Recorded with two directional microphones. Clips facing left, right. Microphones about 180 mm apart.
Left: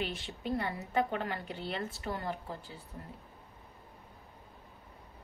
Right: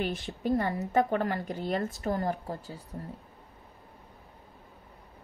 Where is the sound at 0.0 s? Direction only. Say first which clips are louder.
Right 6 dB; 45° right (ahead or behind).